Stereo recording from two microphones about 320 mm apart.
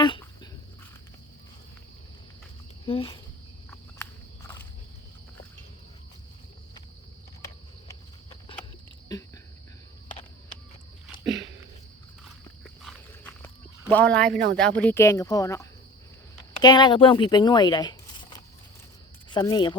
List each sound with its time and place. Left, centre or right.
2.8 s speech: centre
3.9 s cricket: centre
9.1 s a sound: centre
12.6 s walk: centre
13.8 s speech: centre